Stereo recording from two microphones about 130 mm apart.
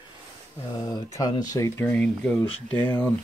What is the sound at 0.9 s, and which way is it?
Speech, 30° left (ahead or behind).